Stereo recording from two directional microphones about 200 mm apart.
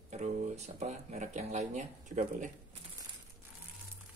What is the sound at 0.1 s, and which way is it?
Speech, 35° right (ahead or behind).